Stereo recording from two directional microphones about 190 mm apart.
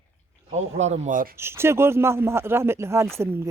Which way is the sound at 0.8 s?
40° right (ahead or behind).